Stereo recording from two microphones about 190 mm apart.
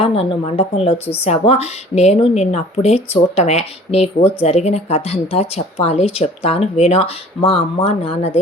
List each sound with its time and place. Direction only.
0.0 s a woman's voice: 30° left (ahead or behind)